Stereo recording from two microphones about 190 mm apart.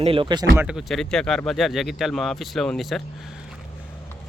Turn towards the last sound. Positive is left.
turn(degrees=0)  # may be behind; listen again after turning